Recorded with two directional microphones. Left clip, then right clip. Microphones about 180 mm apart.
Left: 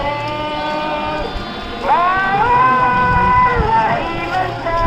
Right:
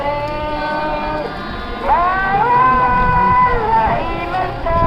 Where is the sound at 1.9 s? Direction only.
50° left (ahead or behind).